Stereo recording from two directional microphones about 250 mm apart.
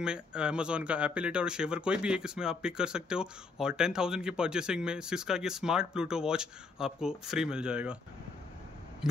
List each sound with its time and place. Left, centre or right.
0.0 s speech: centre